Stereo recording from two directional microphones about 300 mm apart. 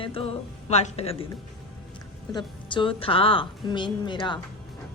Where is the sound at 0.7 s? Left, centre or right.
Centre.